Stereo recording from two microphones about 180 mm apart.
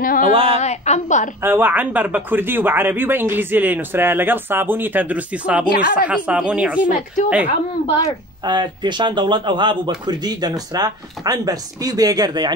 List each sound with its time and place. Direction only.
0.0 s a woman's voice: 50° left (ahead or behind)
0.3 s a woman's voice: 30° right (ahead or behind)
0.6 s a woman's voice: 40° left (ahead or behind)
1.4 s speech: 10° right (ahead or behind)
7.4 s a woman's voice: 35° left (ahead or behind)
8.5 s a man's voice: 25° right (ahead or behind)